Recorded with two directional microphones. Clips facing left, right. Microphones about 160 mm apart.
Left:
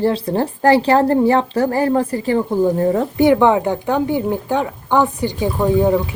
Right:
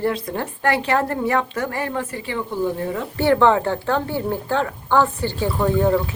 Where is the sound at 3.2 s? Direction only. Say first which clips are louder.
Left 2 dB; 15° left (ahead or behind).